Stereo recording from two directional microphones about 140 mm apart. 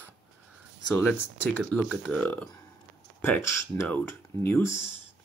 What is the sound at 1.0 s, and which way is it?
Speech, 15° left (ahead or behind).